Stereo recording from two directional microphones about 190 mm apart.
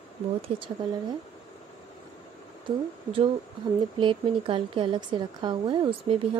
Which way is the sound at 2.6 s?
25° right (ahead or behind).